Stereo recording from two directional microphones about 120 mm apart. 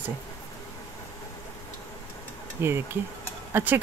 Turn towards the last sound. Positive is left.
turn(degrees=-15)  # may be behind; listen again after turning